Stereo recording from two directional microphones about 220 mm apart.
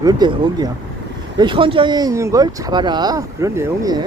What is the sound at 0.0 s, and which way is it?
Speech, 20° right (ahead or behind).